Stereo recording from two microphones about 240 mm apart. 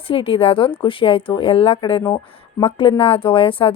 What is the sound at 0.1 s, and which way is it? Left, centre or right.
Speech, left.